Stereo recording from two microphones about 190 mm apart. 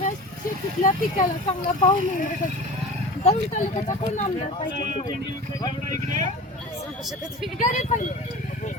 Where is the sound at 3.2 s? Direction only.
35° left (ahead or behind).